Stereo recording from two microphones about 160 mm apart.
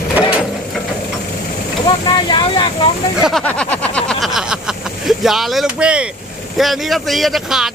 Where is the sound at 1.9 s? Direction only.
30° left (ahead or behind).